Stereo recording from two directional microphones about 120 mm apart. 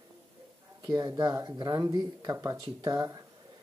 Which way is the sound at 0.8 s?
35° right (ahead or behind).